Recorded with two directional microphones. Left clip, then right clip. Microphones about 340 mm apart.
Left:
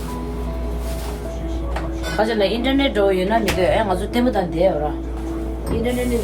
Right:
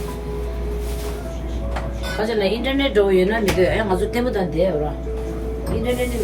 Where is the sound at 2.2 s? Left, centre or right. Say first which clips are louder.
Left 2 dB; left.